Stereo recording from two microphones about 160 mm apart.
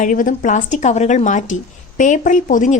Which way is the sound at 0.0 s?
55° left (ahead or behind).